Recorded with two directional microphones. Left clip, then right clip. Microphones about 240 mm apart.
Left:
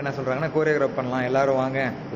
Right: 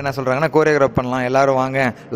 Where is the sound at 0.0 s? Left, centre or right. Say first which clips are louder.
Right 7 dB; right.